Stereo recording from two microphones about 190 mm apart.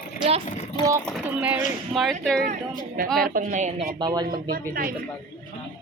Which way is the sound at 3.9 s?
20° right (ahead or behind).